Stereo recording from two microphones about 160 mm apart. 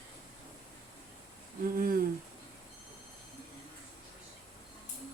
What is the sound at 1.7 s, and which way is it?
Humming, 60° right (ahead or behind).